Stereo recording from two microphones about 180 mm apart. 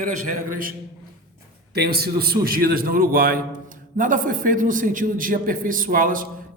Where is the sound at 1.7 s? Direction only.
60° right (ahead or behind).